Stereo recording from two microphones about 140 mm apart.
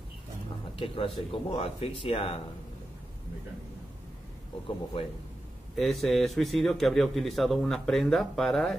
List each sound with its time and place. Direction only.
0.7 s speech: 40° left (ahead or behind)
5.8 s speech: centre (ahead or behind)